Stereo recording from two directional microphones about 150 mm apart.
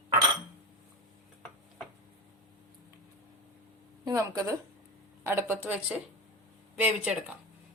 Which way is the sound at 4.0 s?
20° right (ahead or behind).